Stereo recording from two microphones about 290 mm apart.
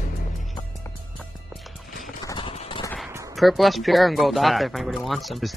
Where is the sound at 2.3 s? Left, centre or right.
Centre.